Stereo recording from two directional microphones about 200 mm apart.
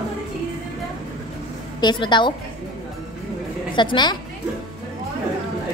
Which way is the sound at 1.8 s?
20° left (ahead or behind).